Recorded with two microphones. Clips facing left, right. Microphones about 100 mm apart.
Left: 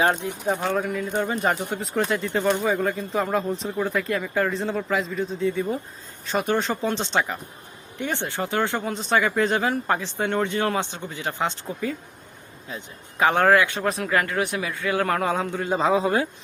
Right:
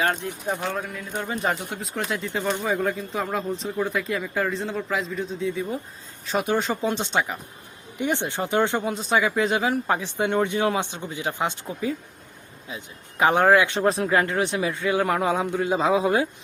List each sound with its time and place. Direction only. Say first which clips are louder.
0.0 s speech: left 3 dB; 15° left (ahead or behind)
0.4 s speech: left 4 dB; centre (ahead or behind)
13.1 s speech: even; 15° right (ahead or behind)
13.7 s speech: right 3 dB; 30° right (ahead or behind); by 16.3 s 15° right (ahead or behind)